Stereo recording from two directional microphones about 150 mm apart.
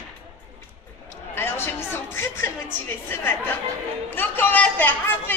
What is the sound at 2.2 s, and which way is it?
A woman's voice, 15° left (ahead or behind).